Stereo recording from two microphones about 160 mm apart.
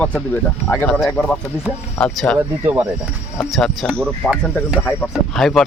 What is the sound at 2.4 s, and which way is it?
Speech, 15° right (ahead or behind).